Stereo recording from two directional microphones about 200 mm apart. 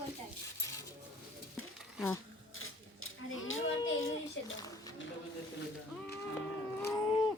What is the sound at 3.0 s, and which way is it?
A child's voice, 85° left.